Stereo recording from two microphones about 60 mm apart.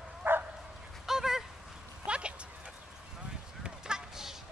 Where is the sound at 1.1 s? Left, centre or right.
Centre.